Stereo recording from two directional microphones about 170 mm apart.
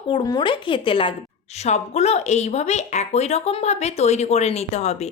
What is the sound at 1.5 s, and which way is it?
A woman's voice, 40° left (ahead or behind).